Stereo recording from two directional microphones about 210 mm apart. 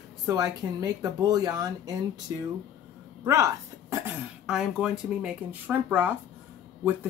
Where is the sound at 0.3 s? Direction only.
15° right (ahead or behind).